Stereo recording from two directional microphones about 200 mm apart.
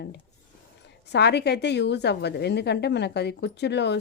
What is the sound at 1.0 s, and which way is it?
A woman's voice, 60° left (ahead or behind).